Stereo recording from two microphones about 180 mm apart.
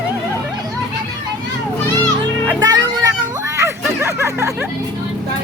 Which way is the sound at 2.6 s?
20° right (ahead or behind).